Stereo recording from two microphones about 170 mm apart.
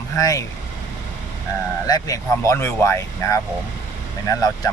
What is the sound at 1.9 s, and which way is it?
Speech, 20° left (ahead or behind).